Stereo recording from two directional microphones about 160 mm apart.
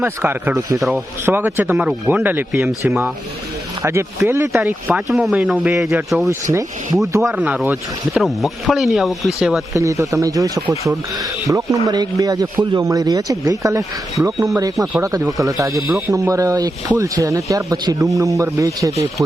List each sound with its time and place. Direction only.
0.0 s speech: 10° right (ahead or behind)
0.8 s speech: centre (ahead or behind)
1.2 s speech: 10° right (ahead or behind)
6.5 s speech: 20° right (ahead or behind)
7.2 s speech: 5° right (ahead or behind)
8.2 s speech: centre (ahead or behind)
9.7 s speech: 20° right (ahead or behind)